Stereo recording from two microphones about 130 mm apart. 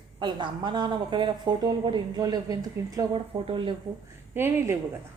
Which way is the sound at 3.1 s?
45° right (ahead or behind).